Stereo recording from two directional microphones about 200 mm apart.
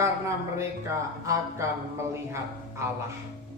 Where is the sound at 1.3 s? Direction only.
15° right (ahead or behind).